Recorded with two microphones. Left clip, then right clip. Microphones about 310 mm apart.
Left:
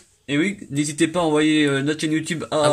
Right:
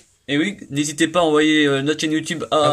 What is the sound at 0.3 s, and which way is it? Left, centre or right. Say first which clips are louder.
Speech: right 1 dB; centre.